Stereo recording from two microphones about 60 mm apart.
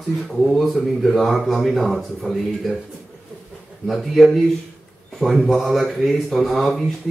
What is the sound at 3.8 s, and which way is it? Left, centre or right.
Speech, centre.